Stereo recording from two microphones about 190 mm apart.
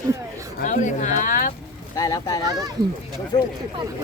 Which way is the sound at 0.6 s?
40° left (ahead or behind).